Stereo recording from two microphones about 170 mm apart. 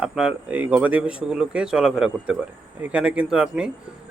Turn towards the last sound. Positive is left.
turn(degrees=-5)  # may be behind; listen again after turning